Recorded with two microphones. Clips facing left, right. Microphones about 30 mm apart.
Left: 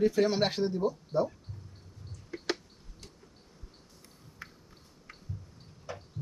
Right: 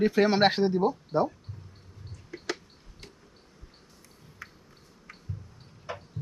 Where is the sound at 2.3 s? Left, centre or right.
Centre.